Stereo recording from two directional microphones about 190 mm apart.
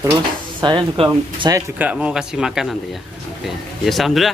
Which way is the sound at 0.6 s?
25° right (ahead or behind).